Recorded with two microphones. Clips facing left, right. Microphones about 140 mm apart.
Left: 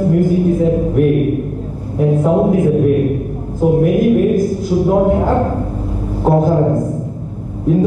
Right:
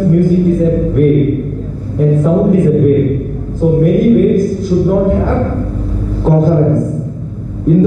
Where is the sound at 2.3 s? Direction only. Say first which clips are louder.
Right 2 dB; 10° left (ahead or behind).